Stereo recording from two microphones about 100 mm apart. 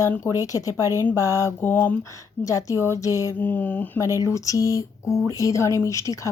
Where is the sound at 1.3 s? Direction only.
25° left (ahead or behind).